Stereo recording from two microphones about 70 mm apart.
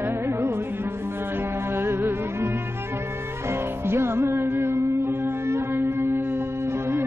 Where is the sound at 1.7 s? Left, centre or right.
Right.